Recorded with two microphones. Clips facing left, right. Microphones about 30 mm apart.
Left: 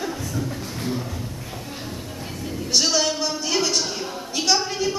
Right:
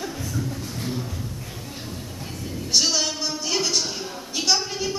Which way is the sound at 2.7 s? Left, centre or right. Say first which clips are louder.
Left 2 dB; centre.